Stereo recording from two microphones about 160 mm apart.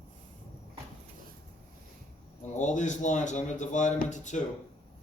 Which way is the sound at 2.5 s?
50° left (ahead or behind).